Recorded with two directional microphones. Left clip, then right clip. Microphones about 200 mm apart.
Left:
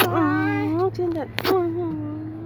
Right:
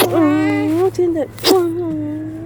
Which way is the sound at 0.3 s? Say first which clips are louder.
Right 6 dB; 10° left (ahead or behind).